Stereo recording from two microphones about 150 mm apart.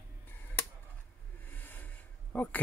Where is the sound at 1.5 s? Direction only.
10° left (ahead or behind).